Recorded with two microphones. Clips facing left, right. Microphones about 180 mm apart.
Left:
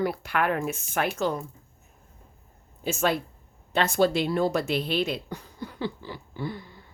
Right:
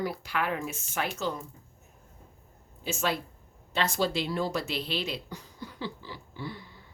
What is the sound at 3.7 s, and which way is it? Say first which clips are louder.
Speech: left 6 dB; 55° left (ahead or behind).